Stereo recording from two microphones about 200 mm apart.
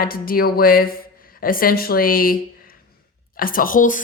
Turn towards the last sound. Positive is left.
turn(degrees=40)  # may be behind; listen again after turning